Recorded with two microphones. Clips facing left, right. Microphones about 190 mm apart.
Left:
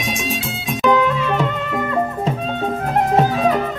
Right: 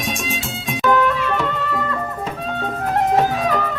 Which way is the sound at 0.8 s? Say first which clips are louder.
Left 1 dB; 15° left (ahead or behind).